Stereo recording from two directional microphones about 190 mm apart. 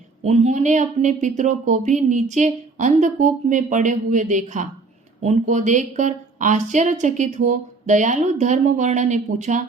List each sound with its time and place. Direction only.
0.2 s speech: 35° right (ahead or behind)